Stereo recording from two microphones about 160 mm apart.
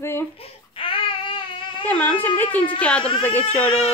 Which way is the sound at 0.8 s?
35° left (ahead or behind).